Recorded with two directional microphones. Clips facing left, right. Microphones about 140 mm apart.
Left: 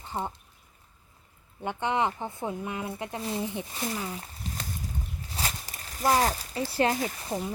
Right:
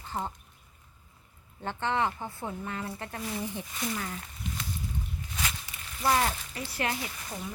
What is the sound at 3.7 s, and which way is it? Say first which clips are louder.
Speech: left 1 dB; 35° left (ahead or behind).